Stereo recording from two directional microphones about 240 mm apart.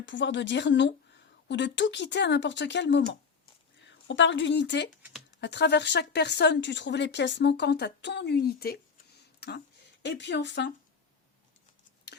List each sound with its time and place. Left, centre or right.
0.0 s speech: left